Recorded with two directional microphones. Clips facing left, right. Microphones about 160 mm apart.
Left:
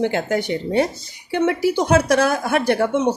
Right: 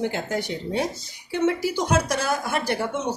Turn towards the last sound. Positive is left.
turn(degrees=60)  # may be behind; listen again after turning